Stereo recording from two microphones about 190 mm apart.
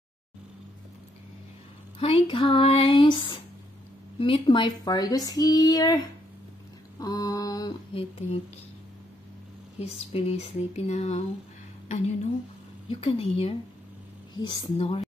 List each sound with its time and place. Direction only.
2.0 s speech: 30° left (ahead or behind)
7.0 s speech: 20° left (ahead or behind)
9.8 s speech: 30° left (ahead or behind)